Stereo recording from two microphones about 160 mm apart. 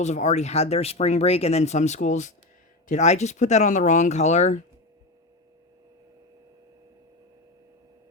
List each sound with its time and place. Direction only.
0.0 s speech: 45° left (ahead or behind)